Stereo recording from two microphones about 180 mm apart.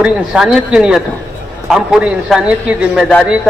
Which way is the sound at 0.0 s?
5° right (ahead or behind).